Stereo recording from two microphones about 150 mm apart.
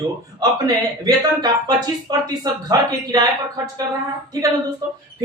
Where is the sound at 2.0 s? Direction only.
25° right (ahead or behind).